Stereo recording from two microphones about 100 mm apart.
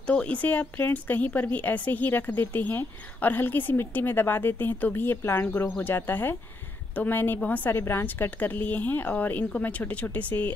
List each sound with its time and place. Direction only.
0.0 s a woman's voice: 10° left (ahead or behind)